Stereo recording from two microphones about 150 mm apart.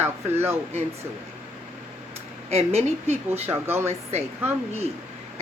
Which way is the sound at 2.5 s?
45° right (ahead or behind).